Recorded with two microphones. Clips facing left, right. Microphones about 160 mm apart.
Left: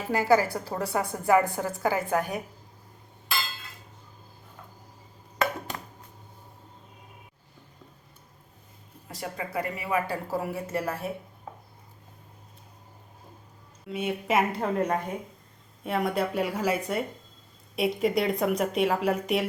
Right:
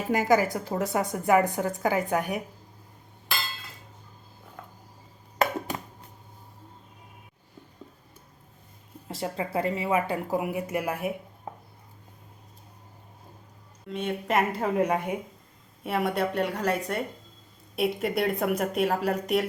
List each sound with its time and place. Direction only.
0.1 s a woman's voice: 15° right (ahead or behind)
9.0 s speech: 25° right (ahead or behind)
13.8 s speech: 5° left (ahead or behind)